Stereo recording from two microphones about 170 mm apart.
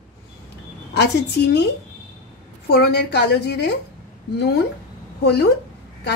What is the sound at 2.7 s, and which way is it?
A woman's voice, 75° left (ahead or behind).